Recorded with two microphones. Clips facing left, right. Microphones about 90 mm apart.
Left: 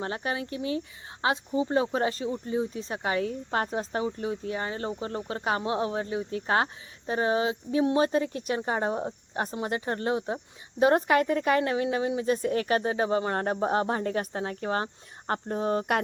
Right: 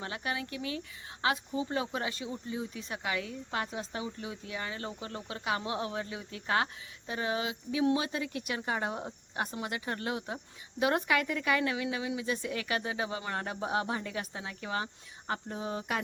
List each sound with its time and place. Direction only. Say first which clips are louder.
0.0 s speech: left 5 dB; 35° left (ahead or behind); by 16.0 s 50° left (ahead or behind)